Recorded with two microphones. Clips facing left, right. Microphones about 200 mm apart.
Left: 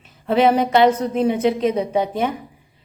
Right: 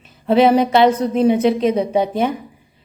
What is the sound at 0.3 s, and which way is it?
A woman's voice, 30° right (ahead or behind).